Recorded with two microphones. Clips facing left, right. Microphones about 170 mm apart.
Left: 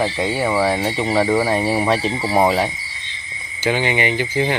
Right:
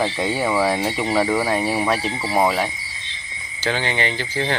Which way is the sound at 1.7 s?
20° left (ahead or behind).